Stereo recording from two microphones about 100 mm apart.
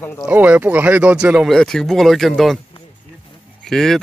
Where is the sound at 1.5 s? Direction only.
5° left (ahead or behind).